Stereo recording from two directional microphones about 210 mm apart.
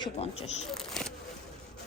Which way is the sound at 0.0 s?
30° left (ahead or behind).